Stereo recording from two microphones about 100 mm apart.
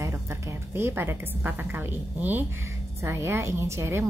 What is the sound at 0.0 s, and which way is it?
A woman's voice, 30° right (ahead or behind).